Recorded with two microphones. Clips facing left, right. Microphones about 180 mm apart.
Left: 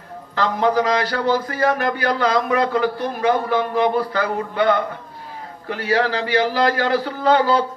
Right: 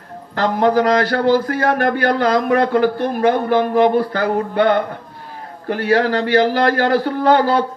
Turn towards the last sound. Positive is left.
turn(degrees=-55)  # may be behind; listen again after turning